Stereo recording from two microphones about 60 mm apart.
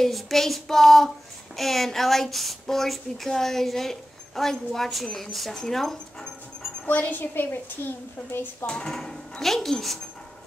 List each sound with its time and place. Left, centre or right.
0.0 s speech: centre
6.9 s a woman's voice: left
8.6 s speech: centre